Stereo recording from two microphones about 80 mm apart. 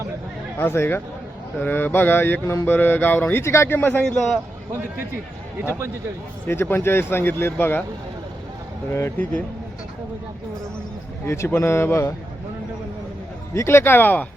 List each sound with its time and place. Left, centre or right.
0.6 s speech: left
3.4 s speech: left
3.8 s speech: left
6.5 s speech: left
8.9 s speech: left
11.3 s speech: left
13.5 s speech: left